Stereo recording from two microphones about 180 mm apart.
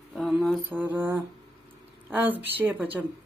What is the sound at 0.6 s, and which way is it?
Speech, 10° right (ahead or behind).